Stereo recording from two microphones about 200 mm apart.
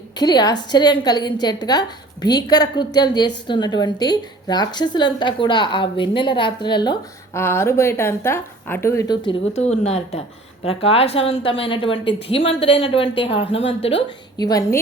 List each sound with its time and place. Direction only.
0.2 s a woman's voice: 20° left (ahead or behind)
9.5 s a woman's voice: 35° left (ahead or behind)